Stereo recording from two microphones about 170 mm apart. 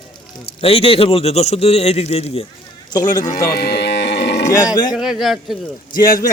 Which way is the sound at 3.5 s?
70° left (ahead or behind).